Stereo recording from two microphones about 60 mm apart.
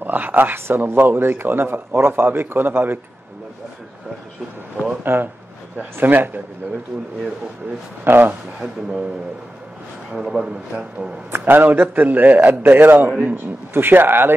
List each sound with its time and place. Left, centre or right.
0.0 s speech: right
5.0 s speech: right
8.0 s speech: right
10.1 s a man's voice: centre
11.3 s speech: right